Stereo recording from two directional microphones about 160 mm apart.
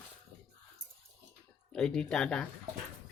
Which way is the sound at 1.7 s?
5° left (ahead or behind).